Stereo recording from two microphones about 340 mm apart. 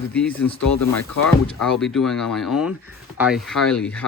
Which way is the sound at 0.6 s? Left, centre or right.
Left.